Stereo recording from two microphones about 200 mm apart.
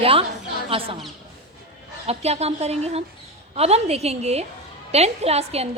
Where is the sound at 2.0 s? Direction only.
30° right (ahead or behind).